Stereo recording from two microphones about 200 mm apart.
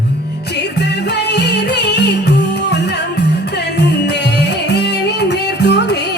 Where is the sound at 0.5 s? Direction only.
55° left (ahead or behind).